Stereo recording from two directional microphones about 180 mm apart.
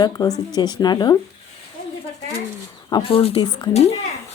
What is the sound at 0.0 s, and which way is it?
Speech, 20° left (ahead or behind).